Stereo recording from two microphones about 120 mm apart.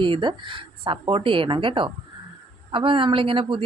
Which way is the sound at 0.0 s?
40° right (ahead or behind).